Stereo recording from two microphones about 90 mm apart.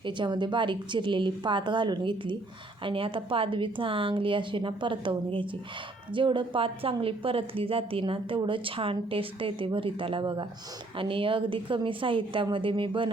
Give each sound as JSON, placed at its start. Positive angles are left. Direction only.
{"t": 0.0, "sound": "a woman's voice", "side_deg": -60}
{"t": 2.8, "sound": "a woman's voice", "side_deg": -80}
{"t": 8.4, "sound": "speech", "side_deg": -70}